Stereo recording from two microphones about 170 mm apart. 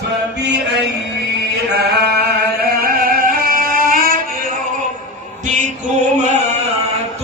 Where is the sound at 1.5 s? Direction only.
70° right (ahead or behind); by 4.2 s 55° right (ahead or behind).